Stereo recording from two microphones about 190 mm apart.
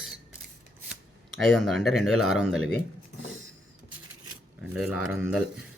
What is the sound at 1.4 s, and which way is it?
Speech, centre (ahead or behind).